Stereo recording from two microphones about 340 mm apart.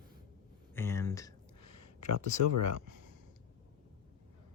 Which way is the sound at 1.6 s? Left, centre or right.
Left.